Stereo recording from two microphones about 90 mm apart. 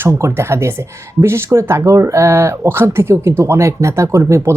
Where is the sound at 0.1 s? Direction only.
30° right (ahead or behind).